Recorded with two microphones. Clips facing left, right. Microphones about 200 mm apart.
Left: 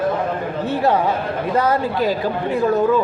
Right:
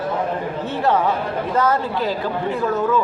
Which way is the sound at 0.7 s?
10° left (ahead or behind).